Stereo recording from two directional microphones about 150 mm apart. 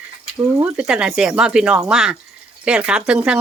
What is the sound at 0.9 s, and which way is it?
Speech, 5° right (ahead or behind).